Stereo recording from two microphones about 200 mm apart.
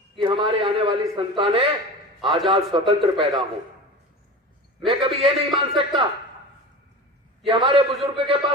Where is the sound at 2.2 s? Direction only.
Centre (ahead or behind).